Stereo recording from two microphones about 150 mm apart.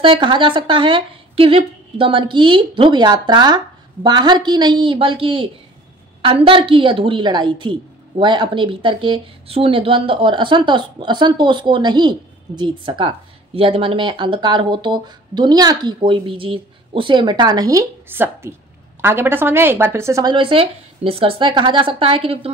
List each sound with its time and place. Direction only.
0.0 s a woman's voice: 35° right (ahead or behind)
20.3 s a woman's voice: 35° right (ahead or behind)